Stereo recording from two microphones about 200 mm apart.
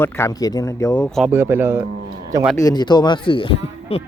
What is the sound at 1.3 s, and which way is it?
Speech, 10° right (ahead or behind).